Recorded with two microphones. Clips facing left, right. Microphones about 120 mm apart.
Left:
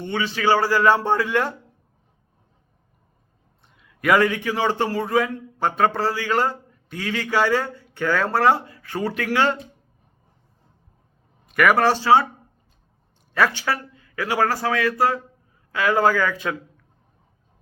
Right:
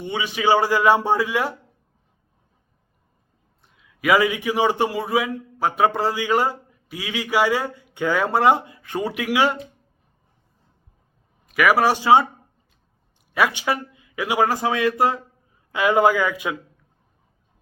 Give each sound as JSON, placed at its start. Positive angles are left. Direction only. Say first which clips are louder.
{"t": 0.0, "sound": "a man's voice", "louder": "even", "side_deg": -15}
{"t": 3.7, "sound": "a man's voice", "louder": "even", "side_deg": 0}
{"t": 11.4, "sound": "a man's voice", "louder": "even", "side_deg": -5}
{"t": 13.3, "sound": "a man's voice", "louder": "even", "side_deg": -15}